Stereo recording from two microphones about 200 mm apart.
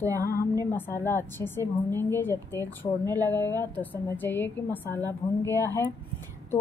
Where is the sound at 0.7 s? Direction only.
10° left (ahead or behind).